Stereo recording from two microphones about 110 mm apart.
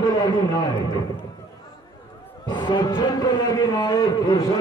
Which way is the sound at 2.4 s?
45° left (ahead or behind).